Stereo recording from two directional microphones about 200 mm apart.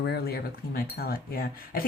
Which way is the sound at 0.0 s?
50° left (ahead or behind).